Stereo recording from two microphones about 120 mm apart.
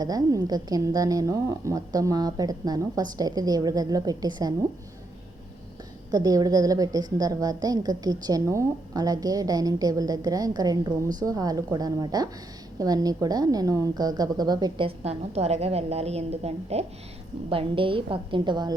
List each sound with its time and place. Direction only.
0.0 s a woman's voice: 30° right (ahead or behind)
6.1 s a woman's voice: 30° right (ahead or behind)
14.8 s a woman's voice: 60° right (ahead or behind)
17.5 s a woman's voice: 45° right (ahead or behind)